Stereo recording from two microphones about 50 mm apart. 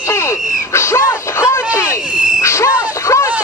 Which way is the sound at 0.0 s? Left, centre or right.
Left.